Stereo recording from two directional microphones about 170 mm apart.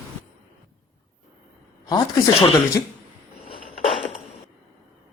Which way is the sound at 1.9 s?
20° left (ahead or behind).